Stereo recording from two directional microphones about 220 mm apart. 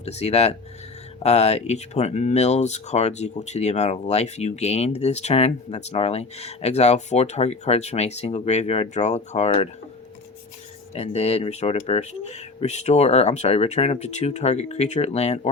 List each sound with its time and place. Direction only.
0.0 s speech: 30° left (ahead or behind)
10.9 s speech: 30° left (ahead or behind)